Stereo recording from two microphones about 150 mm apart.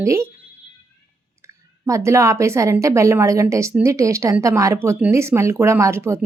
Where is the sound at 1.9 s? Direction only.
20° right (ahead or behind).